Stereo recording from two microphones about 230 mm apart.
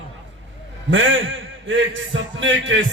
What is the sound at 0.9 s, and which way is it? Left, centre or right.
A man's voice, right.